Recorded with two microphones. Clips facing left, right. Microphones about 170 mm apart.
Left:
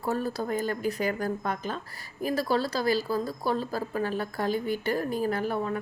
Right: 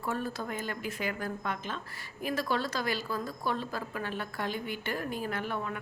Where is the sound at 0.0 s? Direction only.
40° left (ahead or behind).